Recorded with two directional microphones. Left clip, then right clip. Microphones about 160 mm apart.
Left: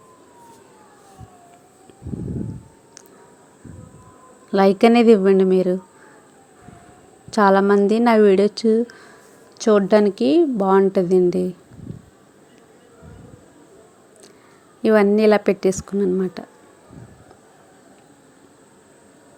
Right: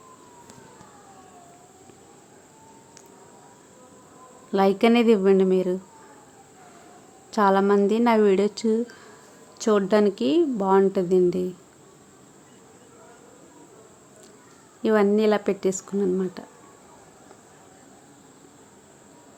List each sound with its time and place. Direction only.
4.5 s a woman's voice: 25° left (ahead or behind)
7.3 s a woman's voice: 25° left (ahead or behind)
14.8 s a woman's voice: 25° left (ahead or behind)